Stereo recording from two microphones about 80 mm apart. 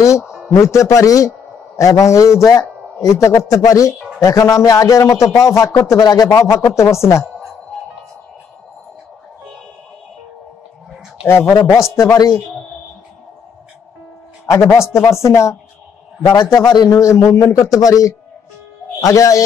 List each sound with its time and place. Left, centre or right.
0.2 s a sound: centre
0.5 s speech: left
6.0 s a man's voice: left
6.3 s speech: left
11.2 s speech: left
11.9 s speech: left
14.4 s speech: left
16.3 s a man's voice: left
17.0 s speech: left